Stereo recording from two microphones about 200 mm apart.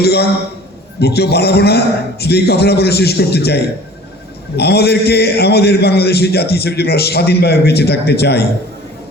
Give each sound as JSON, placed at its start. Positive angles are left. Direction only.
{"t": 0.0, "sound": "a man's voice", "side_deg": 55}